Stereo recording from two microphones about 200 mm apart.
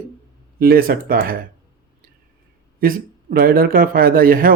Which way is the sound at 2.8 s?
45° right (ahead or behind).